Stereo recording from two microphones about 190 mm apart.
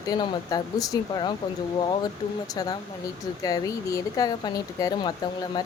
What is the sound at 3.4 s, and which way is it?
Speech, 15° left (ahead or behind).